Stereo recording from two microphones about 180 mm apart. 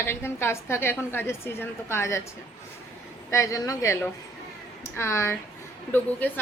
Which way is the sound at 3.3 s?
15° left (ahead or behind).